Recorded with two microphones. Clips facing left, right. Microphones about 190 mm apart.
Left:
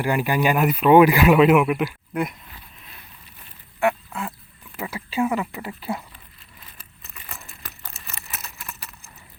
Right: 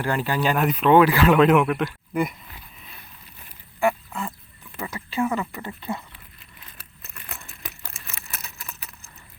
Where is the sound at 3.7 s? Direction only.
5° left (ahead or behind).